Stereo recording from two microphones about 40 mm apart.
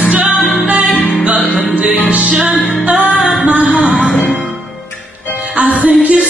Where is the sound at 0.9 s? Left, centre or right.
Left.